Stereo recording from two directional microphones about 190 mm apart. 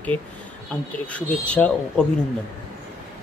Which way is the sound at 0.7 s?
5° left (ahead or behind).